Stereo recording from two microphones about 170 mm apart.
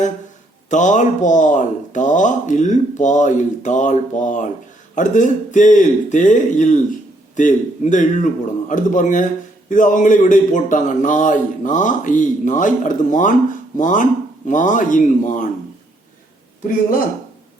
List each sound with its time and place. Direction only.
0.7 s speech: 45° left (ahead or behind)